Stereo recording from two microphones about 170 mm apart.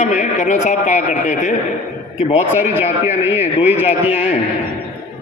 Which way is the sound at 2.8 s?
40° left (ahead or behind).